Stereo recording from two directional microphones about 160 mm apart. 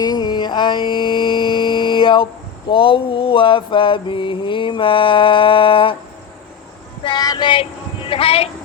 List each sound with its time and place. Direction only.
0.0 s mantra: 25° left (ahead or behind)
7.0 s child singing: 25° left (ahead or behind)